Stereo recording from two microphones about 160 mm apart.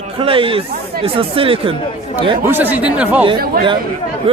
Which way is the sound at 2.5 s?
10° right (ahead or behind).